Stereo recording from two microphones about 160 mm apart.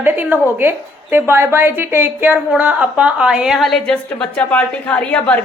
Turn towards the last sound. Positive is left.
turn(degrees=10)  # may be behind; listen again after turning